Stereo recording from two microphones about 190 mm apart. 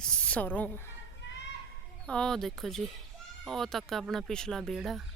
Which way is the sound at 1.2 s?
70° left (ahead or behind).